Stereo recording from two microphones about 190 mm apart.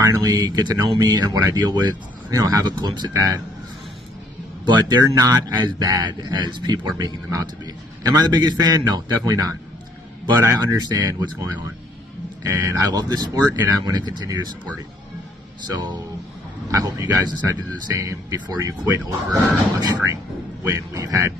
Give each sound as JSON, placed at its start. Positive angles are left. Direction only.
{"t": 0.0, "sound": "speech", "side_deg": -20}
{"t": 4.6, "sound": "speech", "side_deg": -20}
{"t": 15.7, "sound": "speech", "side_deg": -25}